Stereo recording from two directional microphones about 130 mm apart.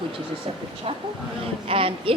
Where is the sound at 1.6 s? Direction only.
45° right (ahead or behind).